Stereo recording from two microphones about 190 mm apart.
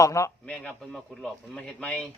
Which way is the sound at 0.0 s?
15° left (ahead or behind).